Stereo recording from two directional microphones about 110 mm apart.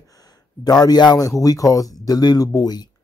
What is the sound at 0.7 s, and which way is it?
Speech, 35° left (ahead or behind).